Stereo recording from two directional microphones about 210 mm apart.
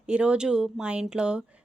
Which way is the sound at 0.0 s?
5° right (ahead or behind).